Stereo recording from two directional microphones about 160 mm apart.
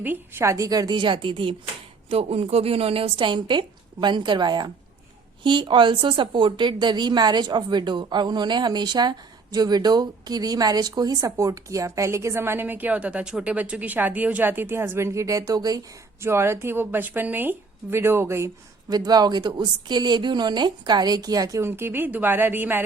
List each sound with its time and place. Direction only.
0.0 s a woman's voice: 15° right (ahead or behind)